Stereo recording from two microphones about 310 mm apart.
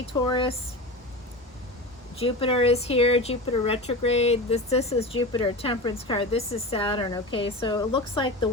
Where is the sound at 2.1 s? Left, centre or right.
Centre.